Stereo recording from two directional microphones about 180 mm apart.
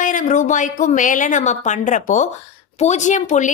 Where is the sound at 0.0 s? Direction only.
45° left (ahead or behind).